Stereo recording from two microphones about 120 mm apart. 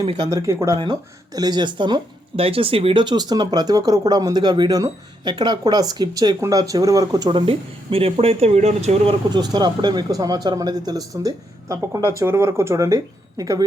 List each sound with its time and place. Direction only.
0.0 s speech: 40° right (ahead or behind)
0.3 s speech: 25° right (ahead or behind); by 9.1 s 65° right (ahead or behind)
9.3 s speech: 35° right (ahead or behind)